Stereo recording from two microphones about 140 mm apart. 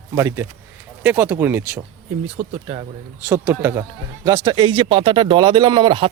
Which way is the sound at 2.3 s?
50° right (ahead or behind).